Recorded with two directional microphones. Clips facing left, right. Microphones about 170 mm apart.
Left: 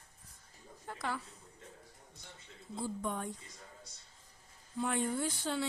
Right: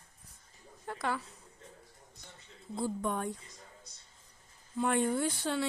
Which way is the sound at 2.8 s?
65° right (ahead or behind).